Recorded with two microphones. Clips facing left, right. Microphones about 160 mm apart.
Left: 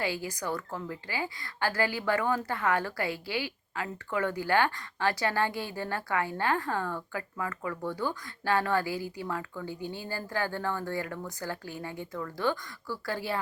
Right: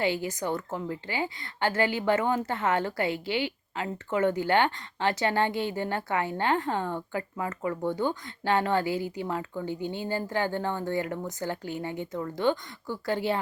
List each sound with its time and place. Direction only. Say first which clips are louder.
0.0 s a woman's voice: right 5 dB; 25° right (ahead or behind)